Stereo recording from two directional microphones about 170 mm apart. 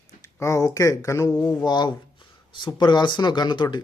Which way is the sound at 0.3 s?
15° left (ahead or behind).